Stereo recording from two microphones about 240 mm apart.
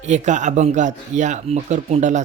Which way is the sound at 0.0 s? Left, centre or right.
Right.